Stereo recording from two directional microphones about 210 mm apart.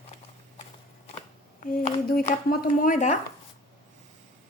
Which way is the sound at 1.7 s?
45° left (ahead or behind).